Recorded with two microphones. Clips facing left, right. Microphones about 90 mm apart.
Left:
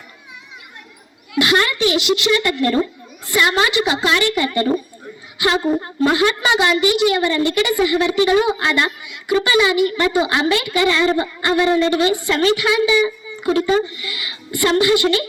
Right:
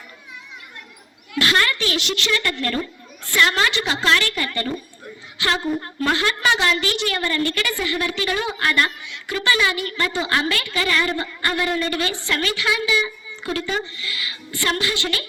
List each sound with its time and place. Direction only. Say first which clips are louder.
1.4 s a woman's voice: left 4 dB; 15° left (ahead or behind)
2.0 s a woman's voice: left 7 dB; 5° left (ahead or behind); by 15.3 s 20° left (ahead or behind)